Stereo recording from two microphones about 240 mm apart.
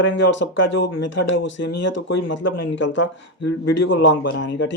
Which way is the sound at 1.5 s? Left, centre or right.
Left.